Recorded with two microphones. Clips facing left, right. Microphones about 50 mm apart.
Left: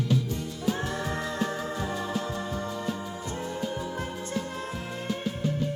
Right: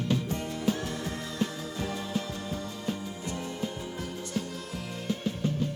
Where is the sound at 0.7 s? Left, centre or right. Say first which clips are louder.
Left 6 dB; left.